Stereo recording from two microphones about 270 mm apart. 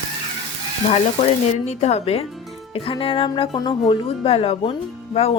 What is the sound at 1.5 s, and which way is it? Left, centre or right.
Speech, left.